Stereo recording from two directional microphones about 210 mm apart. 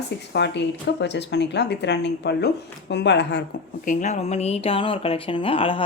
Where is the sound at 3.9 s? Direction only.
35° left (ahead or behind).